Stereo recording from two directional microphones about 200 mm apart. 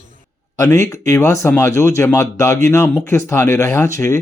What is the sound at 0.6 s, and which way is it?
Speech, 15° left (ahead or behind).